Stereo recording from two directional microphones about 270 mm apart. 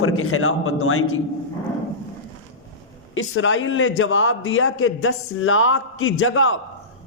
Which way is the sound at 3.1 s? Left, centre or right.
Left.